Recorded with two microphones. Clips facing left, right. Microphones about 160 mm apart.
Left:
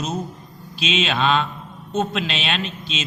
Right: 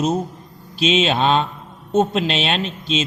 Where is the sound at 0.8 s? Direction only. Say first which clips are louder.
Right 4 dB; 30° right (ahead or behind).